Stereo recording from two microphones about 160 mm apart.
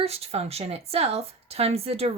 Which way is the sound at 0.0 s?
40° right (ahead or behind).